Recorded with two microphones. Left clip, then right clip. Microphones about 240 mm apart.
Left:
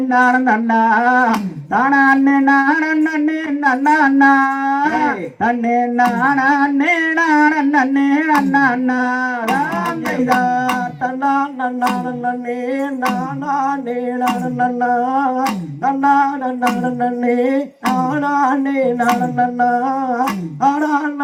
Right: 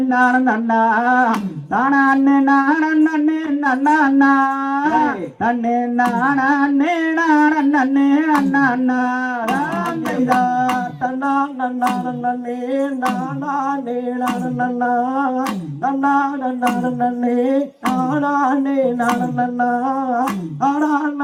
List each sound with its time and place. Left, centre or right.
0.1 s speech: left
10.2 s music: left
11.3 s speech: left
13.5 s speech: left